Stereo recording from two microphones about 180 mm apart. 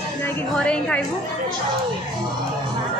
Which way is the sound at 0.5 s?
5° left (ahead or behind).